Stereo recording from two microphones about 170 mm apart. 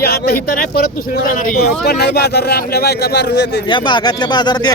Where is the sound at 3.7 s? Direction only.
25° left (ahead or behind).